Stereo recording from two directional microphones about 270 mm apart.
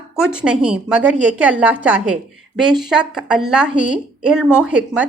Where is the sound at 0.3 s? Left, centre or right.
Centre.